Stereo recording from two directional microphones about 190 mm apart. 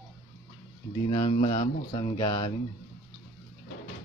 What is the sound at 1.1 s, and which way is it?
Speech, 30° left (ahead or behind).